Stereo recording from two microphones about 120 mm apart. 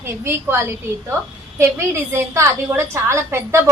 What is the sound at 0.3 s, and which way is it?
A woman's voice, 20° right (ahead or behind).